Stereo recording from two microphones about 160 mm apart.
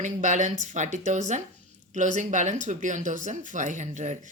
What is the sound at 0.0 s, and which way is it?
Speech, 50° right (ahead or behind).